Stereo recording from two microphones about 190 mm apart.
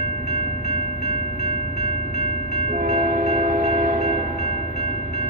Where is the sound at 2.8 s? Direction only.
40° right (ahead or behind).